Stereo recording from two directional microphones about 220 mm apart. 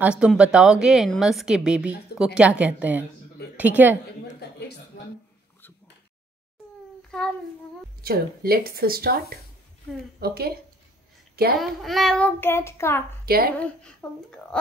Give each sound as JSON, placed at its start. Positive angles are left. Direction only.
{"t": 0.0, "sound": "a woman's voice", "side_deg": -5}
{"t": 4.4, "sound": "a sound", "side_deg": 50}
{"t": 7.1, "sound": "child singing", "side_deg": 5}
{"t": 8.0, "sound": "speech", "side_deg": -45}
{"t": 11.6, "sound": "child singing", "side_deg": 0}
{"t": 13.2, "sound": "a woman's voice", "side_deg": -45}
{"t": 14.0, "sound": "a woman's voice", "side_deg": 5}